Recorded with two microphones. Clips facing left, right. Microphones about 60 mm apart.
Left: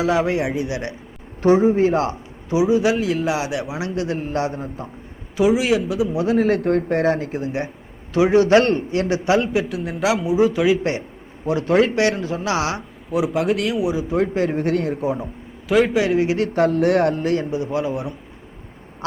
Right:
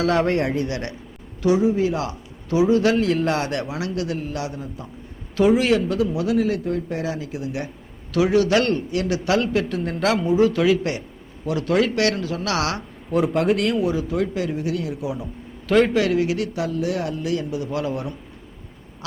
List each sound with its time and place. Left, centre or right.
0.0 s a man's voice: centre
1.4 s a man's voice: left
2.5 s a man's voice: centre
3.7 s a man's voice: left
5.4 s a man's voice: centre
6.1 s a man's voice: left
6.6 s a man's voice: left; by 10.8 s centre
11.4 s a man's voice: left
13.1 s a man's voice: centre
13.8 s a man's voice: centre
14.2 s a man's voice: left
15.6 s a man's voice: centre
16.0 s a man's voice: left
16.6 s a man's voice: left; by 18.1 s centre